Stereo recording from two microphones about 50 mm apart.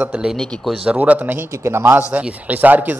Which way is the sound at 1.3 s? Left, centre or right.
Right.